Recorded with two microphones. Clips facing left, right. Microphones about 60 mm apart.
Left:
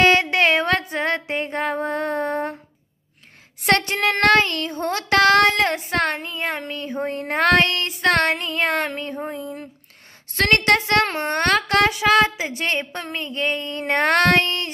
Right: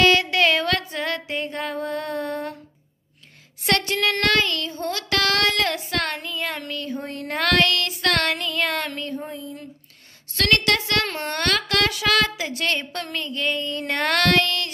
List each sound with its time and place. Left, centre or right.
0.0 s music: left
3.6 s a sound: left
10.3 s a woman's voice: left